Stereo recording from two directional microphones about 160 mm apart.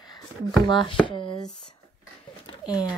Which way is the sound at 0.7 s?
30° left (ahead or behind).